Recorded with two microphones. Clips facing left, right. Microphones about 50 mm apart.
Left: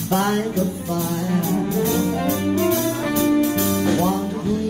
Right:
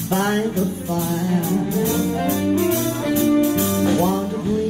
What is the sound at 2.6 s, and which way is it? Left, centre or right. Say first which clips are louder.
Music: even; centre.